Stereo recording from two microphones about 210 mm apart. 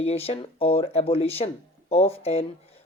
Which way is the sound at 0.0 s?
30° left (ahead or behind).